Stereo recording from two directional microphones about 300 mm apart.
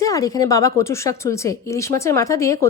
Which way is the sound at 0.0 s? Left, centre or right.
Centre.